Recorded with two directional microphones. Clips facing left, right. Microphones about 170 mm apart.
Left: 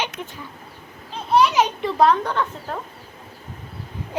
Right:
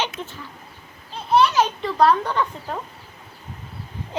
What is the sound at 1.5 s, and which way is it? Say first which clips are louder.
Speech: left 1 dB; 20° left (ahead or behind).